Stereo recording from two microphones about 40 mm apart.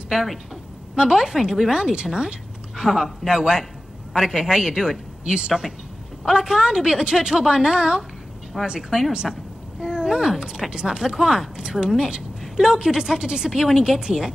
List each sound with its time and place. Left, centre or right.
0.9 s a woman's voice: centre
9.1 s a sound: right
10.4 s a woman's voice: centre